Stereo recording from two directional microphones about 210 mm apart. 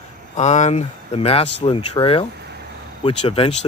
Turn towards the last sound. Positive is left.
turn(degrees=25)  # may be behind; listen again after turning